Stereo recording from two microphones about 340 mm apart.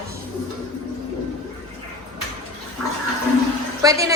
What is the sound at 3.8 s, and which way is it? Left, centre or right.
Speech, centre.